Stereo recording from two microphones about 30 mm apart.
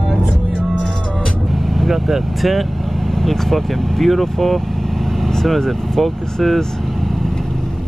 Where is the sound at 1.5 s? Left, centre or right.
Centre.